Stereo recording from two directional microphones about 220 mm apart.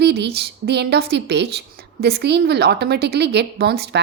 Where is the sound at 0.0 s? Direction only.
50° right (ahead or behind).